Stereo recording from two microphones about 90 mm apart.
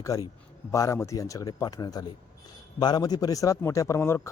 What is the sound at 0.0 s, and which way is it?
Speech, 40° left (ahead or behind).